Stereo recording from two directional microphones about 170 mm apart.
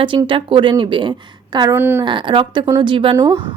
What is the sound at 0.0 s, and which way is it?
Speech, 30° right (ahead or behind).